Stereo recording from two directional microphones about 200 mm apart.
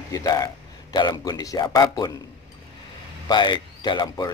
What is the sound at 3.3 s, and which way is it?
Speech, 20° left (ahead or behind).